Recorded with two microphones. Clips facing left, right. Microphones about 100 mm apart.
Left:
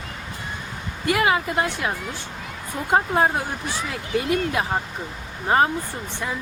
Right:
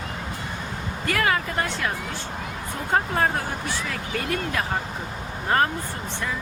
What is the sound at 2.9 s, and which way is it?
Speech, 20° left (ahead or behind).